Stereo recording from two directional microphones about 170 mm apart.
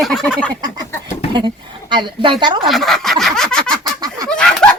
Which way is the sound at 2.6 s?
Centre (ahead or behind).